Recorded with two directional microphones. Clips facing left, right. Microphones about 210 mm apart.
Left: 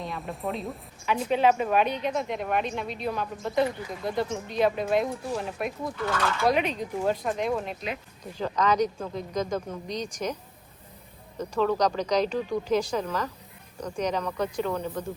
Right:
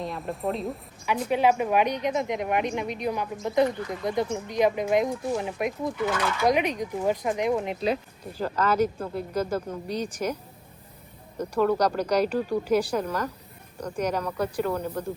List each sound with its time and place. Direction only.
0.0 s a woman's voice: centre (ahead or behind); by 7.8 s 15° right (ahead or behind)
8.2 s speech: 5° right (ahead or behind)
11.3 s speech: 10° right (ahead or behind)